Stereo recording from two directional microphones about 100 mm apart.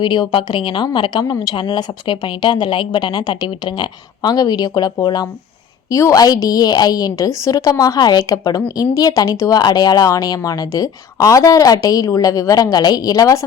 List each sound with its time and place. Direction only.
0.0 s a woman's voice: 50° left (ahead or behind)
1.2 s speech: 35° left (ahead or behind)
1.5 s a woman's voice: 55° left (ahead or behind); by 13.4 s 35° left (ahead or behind)